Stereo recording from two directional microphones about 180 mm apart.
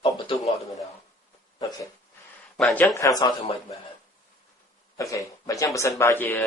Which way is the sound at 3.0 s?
20° left (ahead or behind).